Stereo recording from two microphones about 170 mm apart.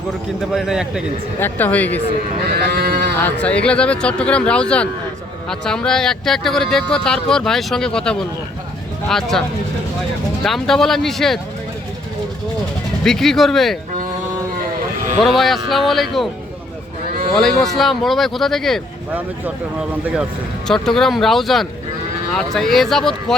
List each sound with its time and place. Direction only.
0.5 s speech: 5° right (ahead or behind)
1.4 s speech: 10° left (ahead or behind)
2.6 s speech: 65° right (ahead or behind)
3.2 s speech: 10° left (ahead or behind)
10.4 s speech: centre (ahead or behind)
13.1 s speech: centre (ahead or behind)
15.2 s speech: centre (ahead or behind)
17.3 s speech: centre (ahead or behind)
20.7 s speech: 5° left (ahead or behind)